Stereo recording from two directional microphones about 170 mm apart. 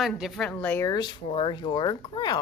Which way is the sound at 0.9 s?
25° left (ahead or behind).